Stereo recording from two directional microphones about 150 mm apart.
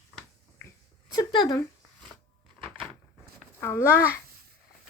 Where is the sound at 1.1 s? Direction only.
30° left (ahead or behind).